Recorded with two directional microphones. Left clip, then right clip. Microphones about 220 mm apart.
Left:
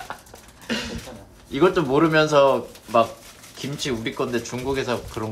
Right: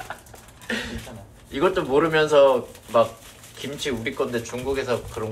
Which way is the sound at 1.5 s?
25° left (ahead or behind).